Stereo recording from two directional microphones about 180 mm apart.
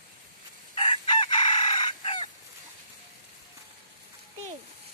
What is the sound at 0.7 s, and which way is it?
Chicken, 25° left (ahead or behind).